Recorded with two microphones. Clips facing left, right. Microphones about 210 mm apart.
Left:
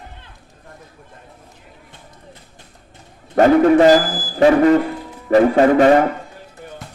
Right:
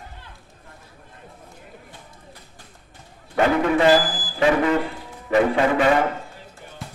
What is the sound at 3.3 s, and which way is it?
A man's voice, 40° left (ahead or behind).